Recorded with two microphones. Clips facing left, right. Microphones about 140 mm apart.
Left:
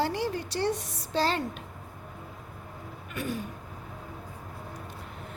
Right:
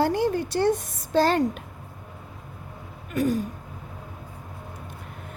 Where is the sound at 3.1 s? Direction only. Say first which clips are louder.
Right 10 dB; 40° right (ahead or behind).